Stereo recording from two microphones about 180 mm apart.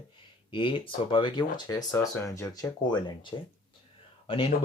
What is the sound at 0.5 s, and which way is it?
Speech, 30° left (ahead or behind).